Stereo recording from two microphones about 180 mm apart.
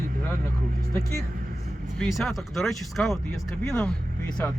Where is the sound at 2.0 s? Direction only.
Centre (ahead or behind).